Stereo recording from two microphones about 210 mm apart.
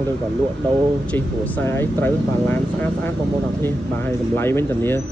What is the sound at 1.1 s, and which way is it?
Speech, 10° left (ahead or behind).